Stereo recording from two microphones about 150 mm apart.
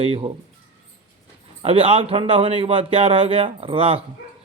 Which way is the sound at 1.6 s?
40° right (ahead or behind).